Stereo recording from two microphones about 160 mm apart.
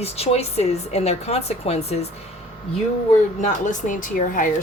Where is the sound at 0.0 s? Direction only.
40° left (ahead or behind).